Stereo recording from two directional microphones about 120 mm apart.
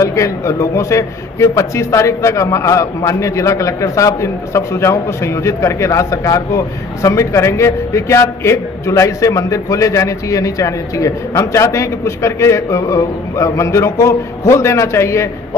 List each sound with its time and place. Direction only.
0.0 s a man's voice: 25° left (ahead or behind)